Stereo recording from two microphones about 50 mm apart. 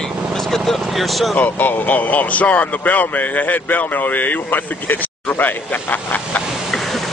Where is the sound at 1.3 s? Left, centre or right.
Left.